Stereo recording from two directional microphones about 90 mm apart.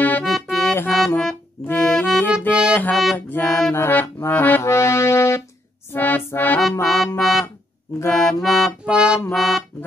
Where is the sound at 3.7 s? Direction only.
25° left (ahead or behind).